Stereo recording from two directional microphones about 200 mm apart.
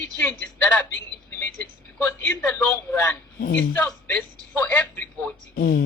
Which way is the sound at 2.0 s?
5° left (ahead or behind).